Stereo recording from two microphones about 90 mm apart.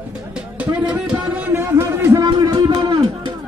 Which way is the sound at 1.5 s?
30° right (ahead or behind).